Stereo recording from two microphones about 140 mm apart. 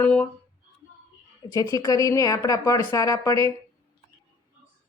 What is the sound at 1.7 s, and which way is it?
A woman's voice, 25° left (ahead or behind).